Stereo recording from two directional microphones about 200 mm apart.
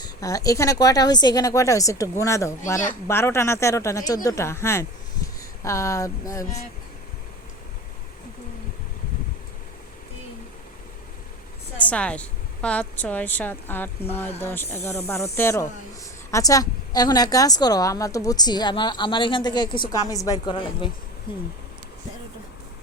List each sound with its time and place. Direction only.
0.0 s a woman's voice: 15° left (ahead or behind)
11.9 s a woman's voice: 5° left (ahead or behind); by 21.4 s 25° left (ahead or behind)